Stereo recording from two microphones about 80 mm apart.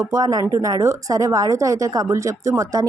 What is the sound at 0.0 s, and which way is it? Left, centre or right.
Speech, right.